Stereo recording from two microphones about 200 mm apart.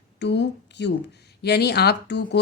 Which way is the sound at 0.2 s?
60° left (ahead or behind).